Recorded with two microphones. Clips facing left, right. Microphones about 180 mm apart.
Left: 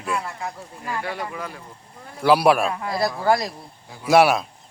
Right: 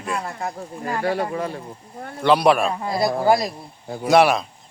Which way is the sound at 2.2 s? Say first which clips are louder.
Even; 5° left (ahead or behind).